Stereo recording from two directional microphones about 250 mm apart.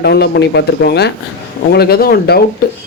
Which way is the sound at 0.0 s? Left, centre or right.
Left.